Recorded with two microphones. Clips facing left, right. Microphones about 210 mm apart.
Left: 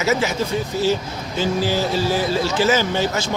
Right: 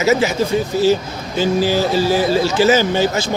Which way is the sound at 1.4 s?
5° right (ahead or behind).